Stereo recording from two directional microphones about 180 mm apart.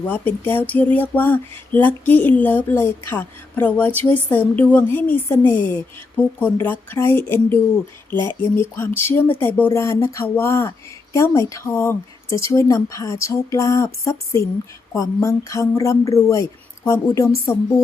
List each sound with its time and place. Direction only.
0.0 s a woman's voice: 10° left (ahead or behind)
8.7 s a woman's voice: 15° left (ahead or behind)